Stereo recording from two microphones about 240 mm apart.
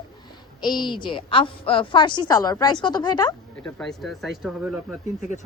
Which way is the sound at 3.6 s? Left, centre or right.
Centre.